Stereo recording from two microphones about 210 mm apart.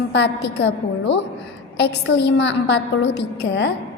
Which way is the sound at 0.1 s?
55° left (ahead or behind).